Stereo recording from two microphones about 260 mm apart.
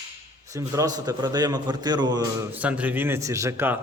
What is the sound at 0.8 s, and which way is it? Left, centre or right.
A man's voice, centre.